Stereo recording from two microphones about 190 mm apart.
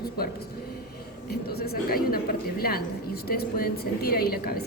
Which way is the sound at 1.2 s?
55° left (ahead or behind).